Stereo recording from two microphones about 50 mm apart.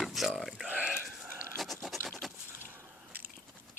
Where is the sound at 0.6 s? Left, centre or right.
Right.